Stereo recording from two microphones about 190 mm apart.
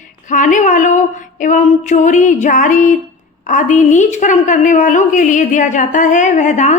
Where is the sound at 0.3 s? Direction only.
40° left (ahead or behind).